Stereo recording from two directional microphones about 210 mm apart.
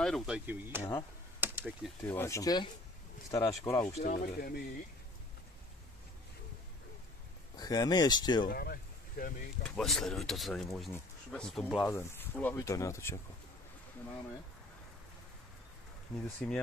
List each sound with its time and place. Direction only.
0.0 s speech: centre (ahead or behind)
0.5 s speech: 10° right (ahead or behind)
1.4 s a sound: 10° right (ahead or behind)
2.0 s speech: 10° left (ahead or behind)
3.9 s speech: 35° left (ahead or behind)
7.5 s speech: 20° left (ahead or behind)
8.5 s speech: 45° left (ahead or behind)
9.8 s speech: centre (ahead or behind)
16.4 s speech: centre (ahead or behind)